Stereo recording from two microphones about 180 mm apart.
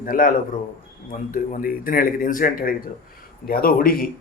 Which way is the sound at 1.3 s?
50° left (ahead or behind).